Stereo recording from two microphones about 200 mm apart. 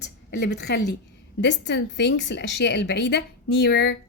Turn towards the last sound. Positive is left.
turn(degrees=55)  # may be behind; listen again after turning